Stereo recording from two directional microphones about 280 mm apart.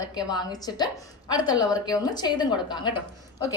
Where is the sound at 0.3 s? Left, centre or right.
Centre.